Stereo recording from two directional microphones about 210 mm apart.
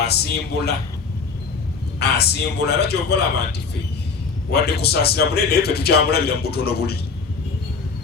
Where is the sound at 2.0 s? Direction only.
55° left (ahead or behind).